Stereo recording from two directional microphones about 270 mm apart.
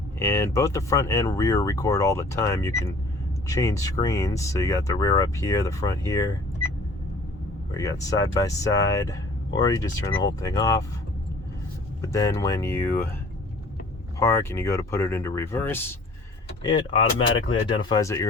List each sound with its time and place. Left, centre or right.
0.2 s speech: centre
7.7 s speech: centre
12.0 s speech: centre
14.2 s speech: centre